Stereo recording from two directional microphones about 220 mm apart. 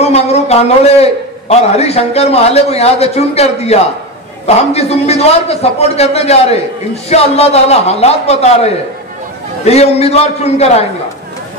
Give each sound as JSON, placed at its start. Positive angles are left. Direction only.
{"t": 0.0, "sound": "a man's voice", "side_deg": 30}
{"t": 9.7, "sound": "a man's voice", "side_deg": 30}